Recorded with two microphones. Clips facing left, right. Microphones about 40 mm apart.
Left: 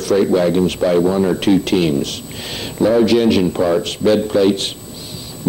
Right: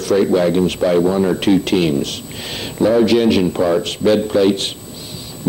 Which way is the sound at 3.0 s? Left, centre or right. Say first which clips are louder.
Even; right.